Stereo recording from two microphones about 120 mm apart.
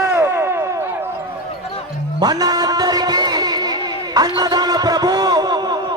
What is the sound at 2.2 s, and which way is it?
Music, 35° right (ahead or behind).